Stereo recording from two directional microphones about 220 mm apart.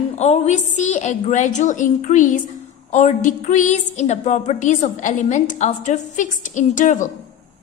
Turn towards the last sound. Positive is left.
turn(degrees=35)  # may be behind; listen again after turning